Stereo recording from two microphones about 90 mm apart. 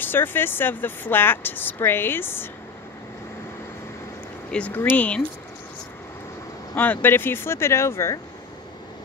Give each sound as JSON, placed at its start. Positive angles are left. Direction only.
{"t": 0.0, "sound": "speech", "side_deg": 25}
{"t": 4.5, "sound": "speech", "side_deg": 10}
{"t": 6.7, "sound": "speech", "side_deg": 20}